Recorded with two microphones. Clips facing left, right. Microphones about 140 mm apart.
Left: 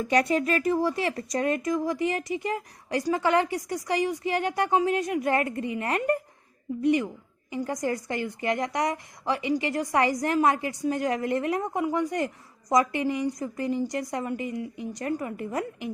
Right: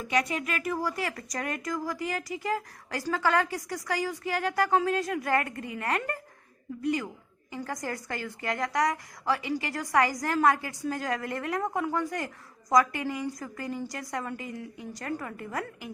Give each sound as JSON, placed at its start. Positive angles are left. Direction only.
{"t": 0.0, "sound": "a woman's voice", "side_deg": 35}